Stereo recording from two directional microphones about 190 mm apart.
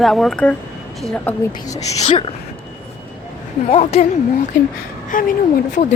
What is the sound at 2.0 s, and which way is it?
Speech, 35° left (ahead or behind).